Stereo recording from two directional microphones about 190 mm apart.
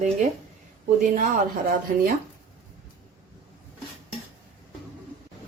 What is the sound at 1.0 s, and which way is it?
Speech, 45° right (ahead or behind).